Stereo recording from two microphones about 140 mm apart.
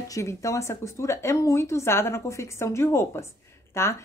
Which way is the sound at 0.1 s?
20° left (ahead or behind).